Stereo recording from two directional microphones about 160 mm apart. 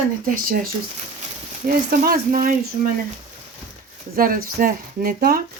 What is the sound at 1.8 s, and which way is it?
Speech, 70° right (ahead or behind).